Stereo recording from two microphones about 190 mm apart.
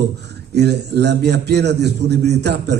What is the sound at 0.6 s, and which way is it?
A man's voice, 60° right (ahead or behind).